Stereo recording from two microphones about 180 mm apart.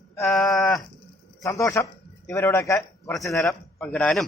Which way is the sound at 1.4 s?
20° left (ahead or behind).